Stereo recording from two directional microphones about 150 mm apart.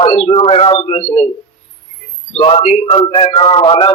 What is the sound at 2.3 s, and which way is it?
Speech, 45° left (ahead or behind).